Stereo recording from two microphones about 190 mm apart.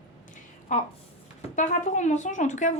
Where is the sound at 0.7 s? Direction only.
40° left (ahead or behind).